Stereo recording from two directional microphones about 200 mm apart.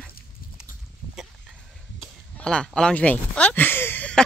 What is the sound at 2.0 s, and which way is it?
Speech, 5° left (ahead or behind).